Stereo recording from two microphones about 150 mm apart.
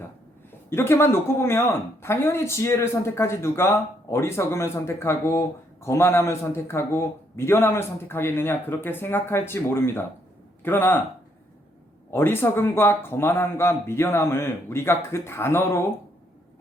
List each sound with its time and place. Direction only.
0.7 s a man's voice: 15° left (ahead or behind)
12.1 s speech: 15° left (ahead or behind)